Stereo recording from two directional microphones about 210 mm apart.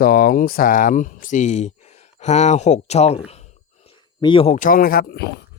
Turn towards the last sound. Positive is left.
turn(degrees=50)  # may be behind; listen again after turning